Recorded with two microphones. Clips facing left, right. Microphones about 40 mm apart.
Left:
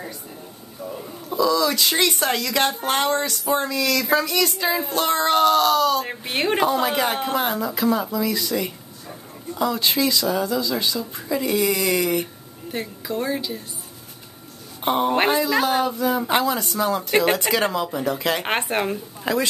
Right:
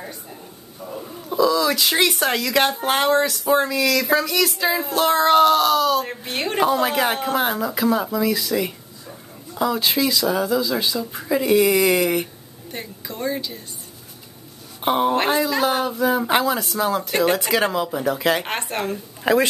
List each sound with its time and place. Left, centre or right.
0.8 s speech: centre
6.0 s a woman's voice: centre
6.6 s speech: centre
12.7 s speech: centre
14.8 s speech: centre
17.1 s a woman's voice: centre
17.4 s speech: centre
18.4 s speech: centre
19.2 s speech: centre